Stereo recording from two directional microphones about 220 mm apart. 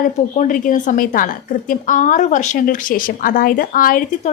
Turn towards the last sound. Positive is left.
turn(degrees=35)  # may be behind; listen again after turning